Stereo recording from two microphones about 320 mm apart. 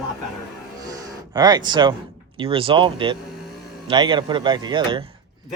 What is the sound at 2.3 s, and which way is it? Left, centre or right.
Speech, centre.